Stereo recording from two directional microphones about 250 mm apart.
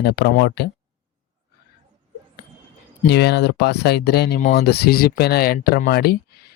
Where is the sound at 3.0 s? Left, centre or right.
Left.